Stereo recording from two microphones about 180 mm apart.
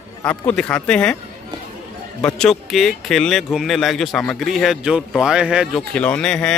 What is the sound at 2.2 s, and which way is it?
Speech, 5° left (ahead or behind).